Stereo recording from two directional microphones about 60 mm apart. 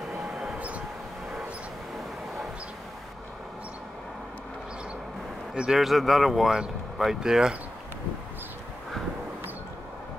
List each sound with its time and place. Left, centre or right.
0.2 s a sound: centre
0.6 s vehicle: right
5.5 s a man's voice: centre
5.8 s speech: centre